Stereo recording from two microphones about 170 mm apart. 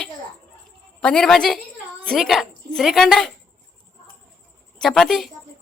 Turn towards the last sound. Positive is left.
turn(degrees=0)  # may be behind; listen again after turning